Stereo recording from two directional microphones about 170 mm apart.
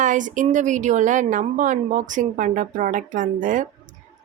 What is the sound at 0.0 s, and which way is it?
Speech, 50° right (ahead or behind).